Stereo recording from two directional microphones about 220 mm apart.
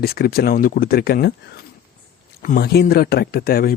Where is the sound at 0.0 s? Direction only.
45° left (ahead or behind).